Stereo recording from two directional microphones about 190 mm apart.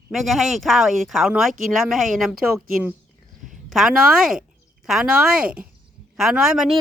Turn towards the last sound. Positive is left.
turn(degrees=-5)  # may be behind; listen again after turning